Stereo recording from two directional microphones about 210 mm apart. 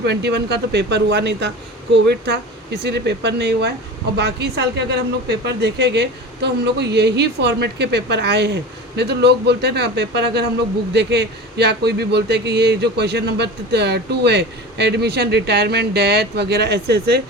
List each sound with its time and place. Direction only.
0.0 s a man's voice: 55° right (ahead or behind)